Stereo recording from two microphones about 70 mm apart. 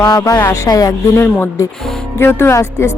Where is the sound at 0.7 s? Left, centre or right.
Left.